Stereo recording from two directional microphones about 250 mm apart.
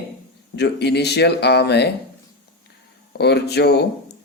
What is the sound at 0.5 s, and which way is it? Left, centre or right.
Speech, left.